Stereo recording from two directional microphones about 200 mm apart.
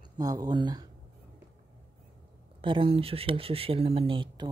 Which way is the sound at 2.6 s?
25° right (ahead or behind).